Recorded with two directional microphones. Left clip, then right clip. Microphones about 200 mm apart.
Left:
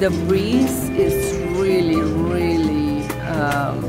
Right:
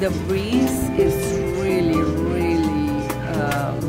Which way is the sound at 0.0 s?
20° left (ahead or behind).